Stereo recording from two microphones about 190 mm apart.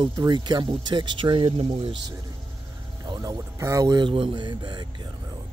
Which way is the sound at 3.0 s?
20° right (ahead or behind).